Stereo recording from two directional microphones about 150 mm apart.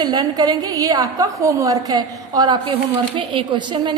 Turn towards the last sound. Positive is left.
turn(degrees=-30)  # may be behind; listen again after turning